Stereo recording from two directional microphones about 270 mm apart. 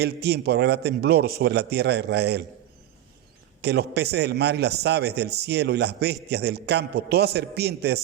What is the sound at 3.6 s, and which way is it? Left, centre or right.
A man's voice, right.